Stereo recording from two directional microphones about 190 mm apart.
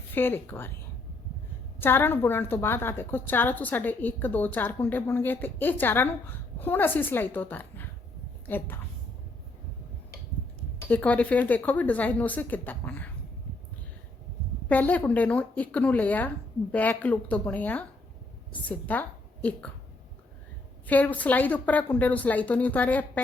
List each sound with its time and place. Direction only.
0.1 s a woman's voice: 10° left (ahead or behind)
1.8 s a woman's voice: 10° left (ahead or behind)
10.8 s a woman's voice: 10° left (ahead or behind)
14.7 s a woman's voice: 10° left (ahead or behind)
20.8 s a woman's voice: 10° left (ahead or behind)